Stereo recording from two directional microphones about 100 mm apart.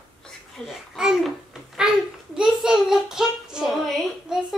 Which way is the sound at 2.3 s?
5° right (ahead or behind).